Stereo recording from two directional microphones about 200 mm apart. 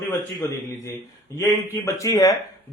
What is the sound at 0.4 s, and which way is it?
Speech, 15° left (ahead or behind).